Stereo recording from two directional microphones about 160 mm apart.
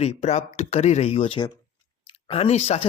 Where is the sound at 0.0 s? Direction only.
45° left (ahead or behind).